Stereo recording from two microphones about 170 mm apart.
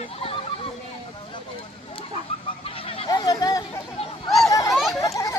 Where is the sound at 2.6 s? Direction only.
35° left (ahead or behind).